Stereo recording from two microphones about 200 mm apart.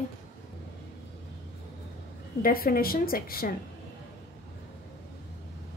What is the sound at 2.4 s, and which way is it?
Speech, 45° left (ahead or behind).